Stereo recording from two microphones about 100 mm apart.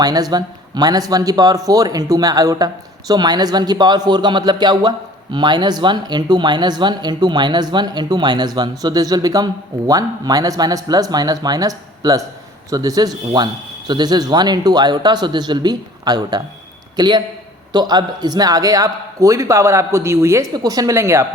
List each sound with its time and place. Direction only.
0.0 s a man's voice: 40° right (ahead or behind)
20.5 s a man's voice: 40° right (ahead or behind)